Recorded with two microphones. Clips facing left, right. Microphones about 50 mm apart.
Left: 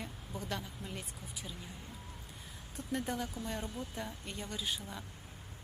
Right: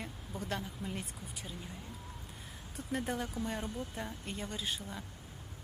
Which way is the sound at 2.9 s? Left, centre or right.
Centre.